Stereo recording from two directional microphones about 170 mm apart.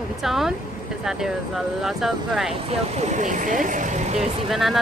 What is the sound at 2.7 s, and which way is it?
Speech, 40° right (ahead or behind).